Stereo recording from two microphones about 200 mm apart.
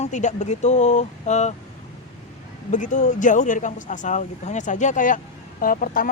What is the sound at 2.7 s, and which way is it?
Speech, 40° left (ahead or behind).